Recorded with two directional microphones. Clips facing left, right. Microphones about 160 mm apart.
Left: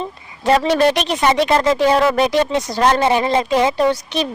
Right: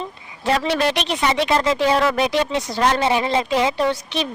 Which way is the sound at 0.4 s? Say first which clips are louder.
Left 5 dB; 45° left (ahead or behind).